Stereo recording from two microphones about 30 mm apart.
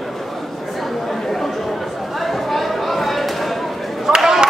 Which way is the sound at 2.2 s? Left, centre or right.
Centre.